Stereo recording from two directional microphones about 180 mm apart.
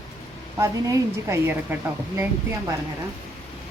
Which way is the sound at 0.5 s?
15° right (ahead or behind).